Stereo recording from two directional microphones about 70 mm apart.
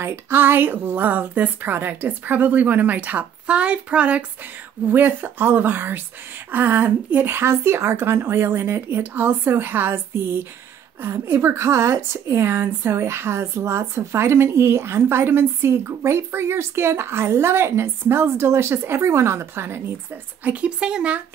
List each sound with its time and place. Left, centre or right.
0.0 s a woman's voice: right
20.4 s speech: centre